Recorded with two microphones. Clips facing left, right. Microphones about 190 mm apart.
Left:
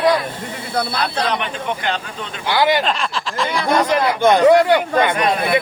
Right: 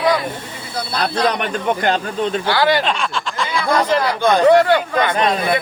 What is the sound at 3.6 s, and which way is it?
Speech, 20° left (ahead or behind).